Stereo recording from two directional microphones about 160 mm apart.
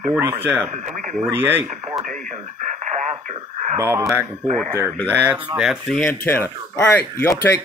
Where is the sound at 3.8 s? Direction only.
20° right (ahead or behind); by 6.1 s centre (ahead or behind).